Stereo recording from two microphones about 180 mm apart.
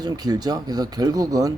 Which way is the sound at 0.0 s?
20° right (ahead or behind).